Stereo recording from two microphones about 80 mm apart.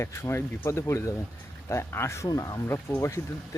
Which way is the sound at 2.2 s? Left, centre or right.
Left.